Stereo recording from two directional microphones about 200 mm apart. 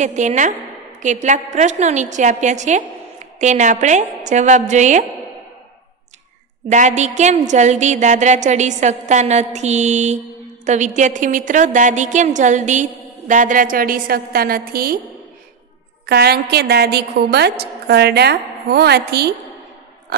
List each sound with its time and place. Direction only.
0.0 s a woman's voice: 35° right (ahead or behind)
6.7 s a woman's voice: 35° right (ahead or behind)
16.1 s a woman's voice: 55° right (ahead or behind)